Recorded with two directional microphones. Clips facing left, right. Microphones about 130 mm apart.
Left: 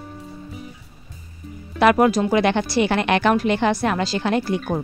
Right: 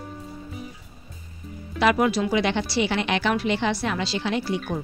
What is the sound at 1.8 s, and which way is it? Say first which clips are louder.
A woman's voice: left 5 dB; 50° left (ahead or behind).